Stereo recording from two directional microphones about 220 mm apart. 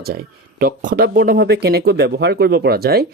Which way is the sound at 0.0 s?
45° right (ahead or behind).